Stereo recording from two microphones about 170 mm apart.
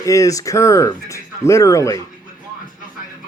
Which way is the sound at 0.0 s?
20° left (ahead or behind).